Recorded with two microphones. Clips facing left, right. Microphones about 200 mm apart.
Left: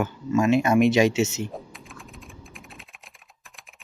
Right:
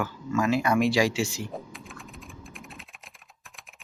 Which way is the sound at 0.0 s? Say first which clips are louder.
Left 4 dB; 20° left (ahead or behind).